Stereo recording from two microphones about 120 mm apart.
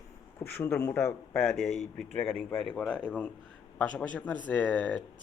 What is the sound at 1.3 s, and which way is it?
Speech, 5° left (ahead or behind).